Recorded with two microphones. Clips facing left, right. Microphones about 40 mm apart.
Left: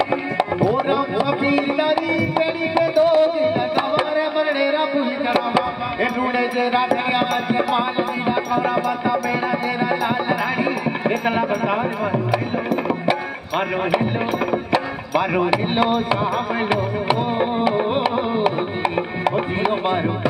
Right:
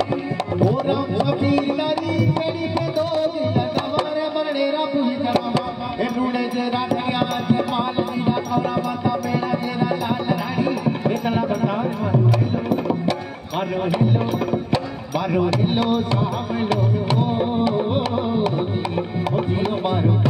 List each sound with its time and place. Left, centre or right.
0.7 s music: centre